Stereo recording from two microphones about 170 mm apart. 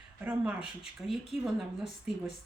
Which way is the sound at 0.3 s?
5° right (ahead or behind).